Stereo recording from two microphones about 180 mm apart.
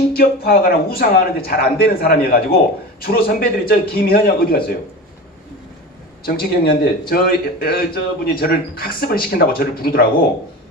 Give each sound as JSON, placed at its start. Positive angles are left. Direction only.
{"t": 0.1, "sound": "speech", "side_deg": 55}
{"t": 6.2, "sound": "speech", "side_deg": 55}